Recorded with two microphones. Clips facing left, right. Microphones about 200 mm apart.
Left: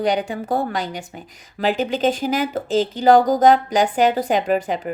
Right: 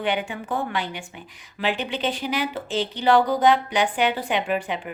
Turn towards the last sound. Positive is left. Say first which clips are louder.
# left 5 dB
turn(degrees=40)  # may be behind; listen again after turning